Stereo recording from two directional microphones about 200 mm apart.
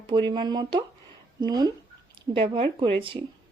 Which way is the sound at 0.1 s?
25° right (ahead or behind).